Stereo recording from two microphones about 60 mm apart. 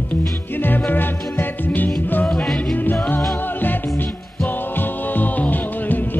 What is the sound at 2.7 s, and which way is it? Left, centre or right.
Music, left.